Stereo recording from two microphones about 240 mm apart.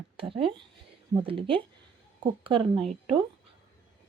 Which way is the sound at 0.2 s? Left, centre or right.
Right.